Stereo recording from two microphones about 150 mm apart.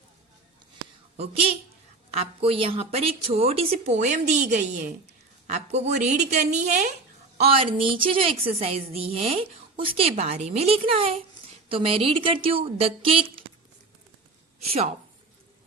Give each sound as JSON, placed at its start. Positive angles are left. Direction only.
{"t": 1.1, "sound": "a woman's voice", "side_deg": -40}
{"t": 7.3, "sound": "a woman's voice", "side_deg": -40}
{"t": 14.7, "sound": "a woman's voice", "side_deg": -45}